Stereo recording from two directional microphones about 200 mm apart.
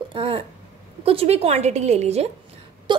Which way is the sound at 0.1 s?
25° right (ahead or behind).